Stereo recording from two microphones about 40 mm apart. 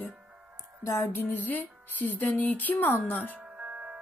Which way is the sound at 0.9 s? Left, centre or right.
Left.